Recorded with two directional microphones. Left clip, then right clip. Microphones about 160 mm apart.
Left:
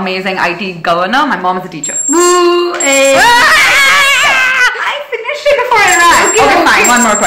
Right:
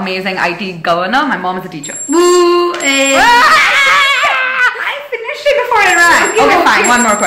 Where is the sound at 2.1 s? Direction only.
25° right (ahead or behind).